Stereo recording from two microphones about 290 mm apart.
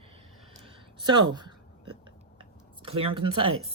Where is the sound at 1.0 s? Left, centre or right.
Centre.